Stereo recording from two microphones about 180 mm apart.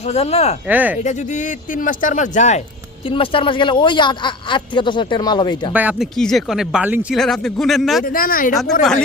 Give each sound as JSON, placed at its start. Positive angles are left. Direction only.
{"t": 0.1, "sound": "speech", "side_deg": 35}
{"t": 0.7, "sound": "speech", "side_deg": -10}
{"t": 0.9, "sound": "speech", "side_deg": 40}
{"t": 3.1, "sound": "speech", "side_deg": 30}
{"t": 5.7, "sound": "speech", "side_deg": -10}
{"t": 8.0, "sound": "speech", "side_deg": 50}
{"t": 8.8, "sound": "speech", "side_deg": 5}